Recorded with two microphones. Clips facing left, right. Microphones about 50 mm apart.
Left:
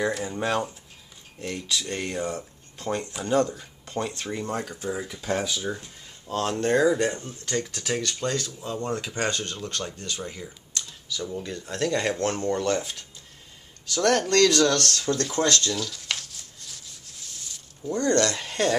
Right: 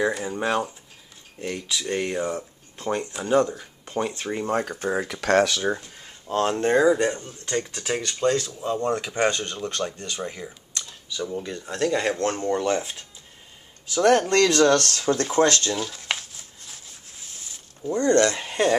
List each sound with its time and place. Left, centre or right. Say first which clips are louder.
0.0 s speech: right 2 dB; centre
4.5 s speech: right 8 dB; right
5.0 s speech: right 11 dB; right
5.8 s speech: right 1 dB; right
9.1 s speech: right 5 dB; centre
10.9 s camera: right 3 dB; right
11.2 s speech: right 3 dB; centre
15.4 s a sound: right 3 dB; right
17.8 s speech: right 3 dB; centre